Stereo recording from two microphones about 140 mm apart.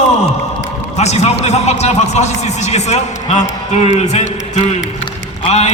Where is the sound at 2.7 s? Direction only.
50° left (ahead or behind).